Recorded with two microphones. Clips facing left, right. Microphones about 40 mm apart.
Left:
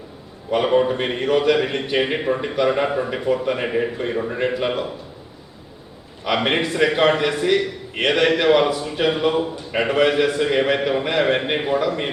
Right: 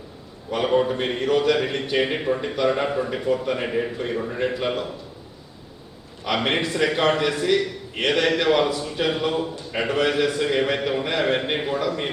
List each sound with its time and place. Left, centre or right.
0.5 s a man's voice: centre
6.2 s a man's voice: centre